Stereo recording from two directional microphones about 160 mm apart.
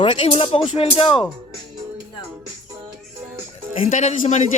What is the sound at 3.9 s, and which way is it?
Speech, 50° left (ahead or behind).